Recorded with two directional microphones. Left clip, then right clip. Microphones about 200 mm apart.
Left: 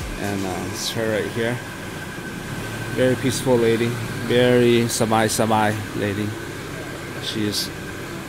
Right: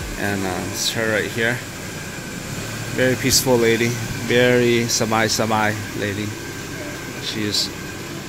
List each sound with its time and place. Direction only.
0.2 s speech: centre (ahead or behind)
3.0 s speech: 10° left (ahead or behind)
7.2 s speech: 15° left (ahead or behind)